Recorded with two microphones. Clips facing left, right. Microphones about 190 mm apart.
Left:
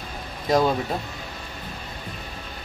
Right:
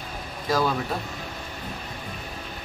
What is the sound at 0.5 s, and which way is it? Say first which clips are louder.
Speech: left 4 dB; 20° left (ahead or behind).